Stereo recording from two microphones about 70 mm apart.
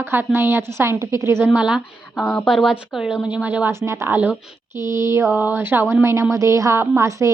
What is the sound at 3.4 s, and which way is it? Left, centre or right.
Speech, right.